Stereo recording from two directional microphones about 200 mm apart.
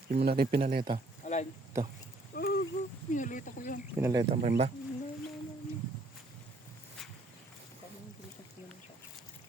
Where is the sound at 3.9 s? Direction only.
15° right (ahead or behind).